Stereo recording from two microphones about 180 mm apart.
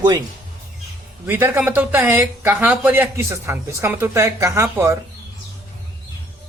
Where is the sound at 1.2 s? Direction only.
10° right (ahead or behind).